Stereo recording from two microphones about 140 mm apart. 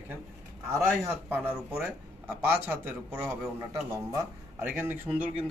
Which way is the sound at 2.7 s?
20° right (ahead or behind).